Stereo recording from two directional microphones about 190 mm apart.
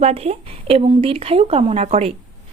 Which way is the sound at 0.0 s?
35° right (ahead or behind).